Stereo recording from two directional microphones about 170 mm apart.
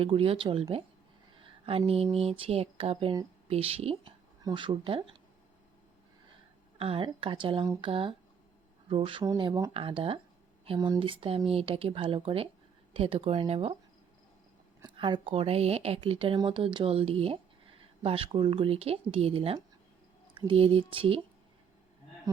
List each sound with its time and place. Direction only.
0.0 s a woman's voice: 35° right (ahead or behind)
2.4 s a woman's voice: 35° right (ahead or behind)
6.7 s a woman's voice: 35° right (ahead or behind)
14.8 s a woman's voice: 30° right (ahead or behind)